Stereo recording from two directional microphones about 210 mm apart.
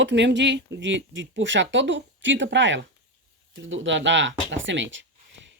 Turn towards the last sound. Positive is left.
turn(degrees=-60)  # may be behind; listen again after turning